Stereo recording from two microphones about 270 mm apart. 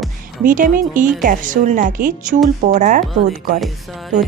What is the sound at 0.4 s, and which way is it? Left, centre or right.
A woman's voice, right.